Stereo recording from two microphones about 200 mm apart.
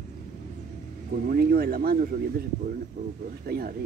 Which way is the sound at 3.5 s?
50° right (ahead or behind).